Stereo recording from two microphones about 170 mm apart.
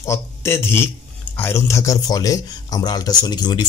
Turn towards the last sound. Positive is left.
turn(degrees=25)  # may be behind; listen again after turning